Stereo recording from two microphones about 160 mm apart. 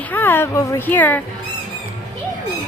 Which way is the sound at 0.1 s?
15° left (ahead or behind).